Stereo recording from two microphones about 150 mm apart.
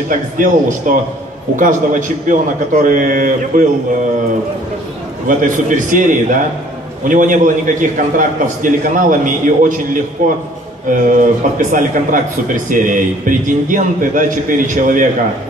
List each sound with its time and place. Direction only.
0.4 s a man's voice: 60° right (ahead or behind)
5.2 s a man's voice: 60° right (ahead or behind)